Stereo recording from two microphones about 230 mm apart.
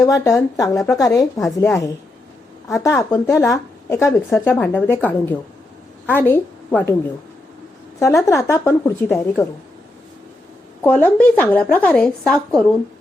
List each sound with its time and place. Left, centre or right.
0.0 s a woman's voice: centre
1.4 s a woman's voice: centre
8.2 s a woman's voice: centre
10.8 s speech: centre